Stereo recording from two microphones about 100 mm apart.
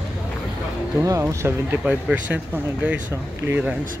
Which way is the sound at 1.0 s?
30° right (ahead or behind).